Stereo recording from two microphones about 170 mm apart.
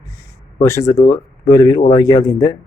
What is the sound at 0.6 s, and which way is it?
Speech, 15° left (ahead or behind).